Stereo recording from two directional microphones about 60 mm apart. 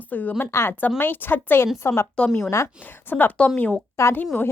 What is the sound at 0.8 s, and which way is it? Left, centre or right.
A woman's voice, left.